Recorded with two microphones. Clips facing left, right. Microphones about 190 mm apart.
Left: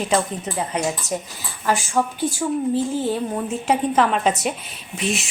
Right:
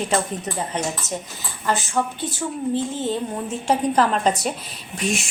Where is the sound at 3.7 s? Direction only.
5° left (ahead or behind).